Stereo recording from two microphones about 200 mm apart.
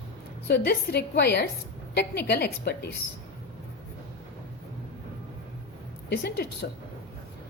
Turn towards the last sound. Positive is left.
turn(degrees=50)  # may be behind; listen again after turning